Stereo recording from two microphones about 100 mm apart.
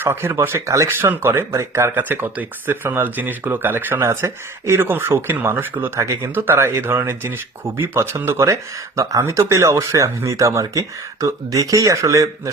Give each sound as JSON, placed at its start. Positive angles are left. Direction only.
{"t": 0.0, "sound": "speech", "side_deg": -25}